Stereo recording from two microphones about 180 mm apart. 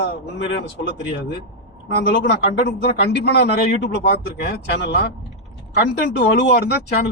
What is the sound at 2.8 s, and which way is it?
Speech, 70° left (ahead or behind).